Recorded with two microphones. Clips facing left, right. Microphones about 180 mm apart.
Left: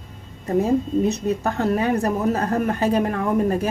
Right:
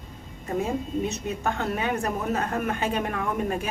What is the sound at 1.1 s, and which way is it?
Speech, 35° left (ahead or behind).